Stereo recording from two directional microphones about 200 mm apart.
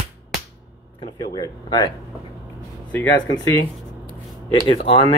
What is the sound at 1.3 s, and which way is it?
Speech, 20° left (ahead or behind).